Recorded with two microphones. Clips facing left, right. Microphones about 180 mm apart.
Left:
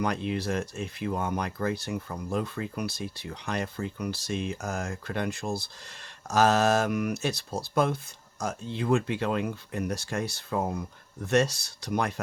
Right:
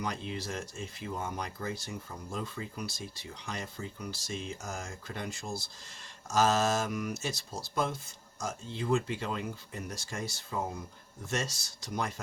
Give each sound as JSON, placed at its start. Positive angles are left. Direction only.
{"t": 0.0, "sound": "speech", "side_deg": 65}